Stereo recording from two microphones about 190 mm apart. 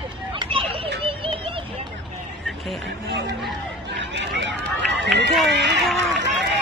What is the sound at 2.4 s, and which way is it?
Vehicle, centre (ahead or behind).